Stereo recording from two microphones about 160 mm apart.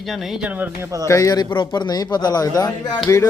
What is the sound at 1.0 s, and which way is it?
A man's voice, 20° left (ahead or behind).